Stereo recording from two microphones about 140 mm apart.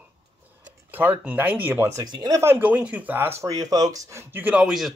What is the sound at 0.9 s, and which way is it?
Speech, 10° right (ahead or behind).